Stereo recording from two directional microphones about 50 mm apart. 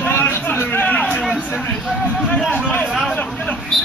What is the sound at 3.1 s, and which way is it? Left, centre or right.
Vehicle, left.